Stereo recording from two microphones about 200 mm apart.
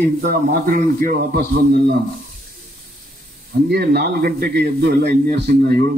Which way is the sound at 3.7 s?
55° right (ahead or behind).